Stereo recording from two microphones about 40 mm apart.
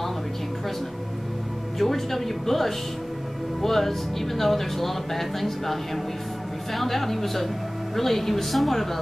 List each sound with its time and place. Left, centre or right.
1.8 s speech: centre